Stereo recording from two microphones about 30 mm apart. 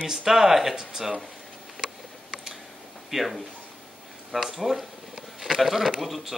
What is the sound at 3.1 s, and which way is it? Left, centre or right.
Speech, centre.